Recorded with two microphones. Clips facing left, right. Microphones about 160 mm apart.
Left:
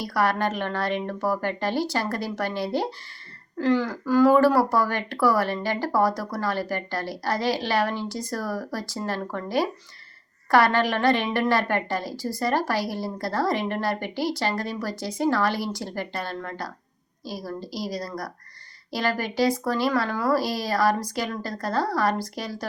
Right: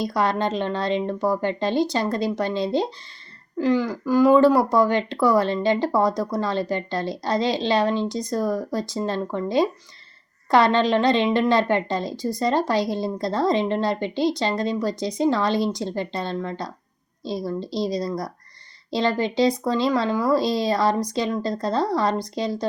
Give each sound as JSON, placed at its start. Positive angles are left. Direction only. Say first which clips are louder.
{"t": 0.0, "sound": "a woman's voice", "louder": "right 2 dB", "side_deg": -20}